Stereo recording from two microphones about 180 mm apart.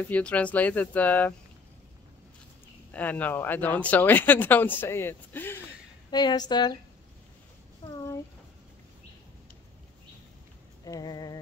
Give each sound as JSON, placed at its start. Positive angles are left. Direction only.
{"t": 0.1, "sound": "speech", "side_deg": 5}
{"t": 2.9, "sound": "speech", "side_deg": 10}
{"t": 6.0, "sound": "speech", "side_deg": 25}
{"t": 10.9, "sound": "speech", "side_deg": 20}